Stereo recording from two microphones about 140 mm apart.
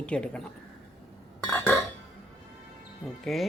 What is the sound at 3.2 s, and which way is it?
Speech, centre (ahead or behind).